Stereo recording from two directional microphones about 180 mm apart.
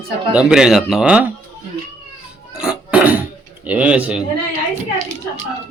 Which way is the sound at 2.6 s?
5° right (ahead or behind).